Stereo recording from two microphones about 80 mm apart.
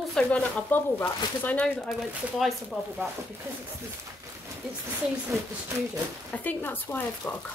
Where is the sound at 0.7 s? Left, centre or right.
Left.